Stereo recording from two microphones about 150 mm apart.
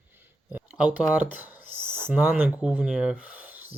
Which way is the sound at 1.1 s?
10° right (ahead or behind).